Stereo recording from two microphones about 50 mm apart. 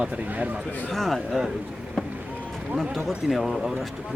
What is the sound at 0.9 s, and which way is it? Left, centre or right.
Speech, centre.